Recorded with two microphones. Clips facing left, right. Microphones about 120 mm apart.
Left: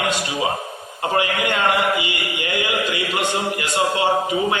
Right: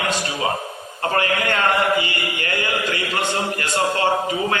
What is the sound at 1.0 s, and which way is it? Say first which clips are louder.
Mantra: even; 15° left (ahead or behind).